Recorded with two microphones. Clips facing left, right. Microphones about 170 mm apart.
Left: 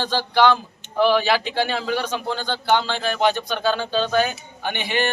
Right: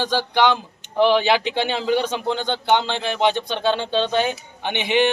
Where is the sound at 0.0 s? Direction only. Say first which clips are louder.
Left 1 dB; 15° right (ahead or behind).